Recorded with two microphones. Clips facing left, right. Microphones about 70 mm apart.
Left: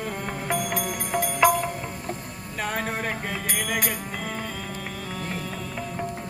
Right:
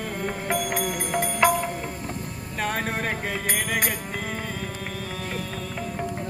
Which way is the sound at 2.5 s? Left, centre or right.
Centre.